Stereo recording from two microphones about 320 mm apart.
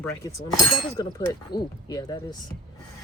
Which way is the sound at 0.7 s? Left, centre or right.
Centre.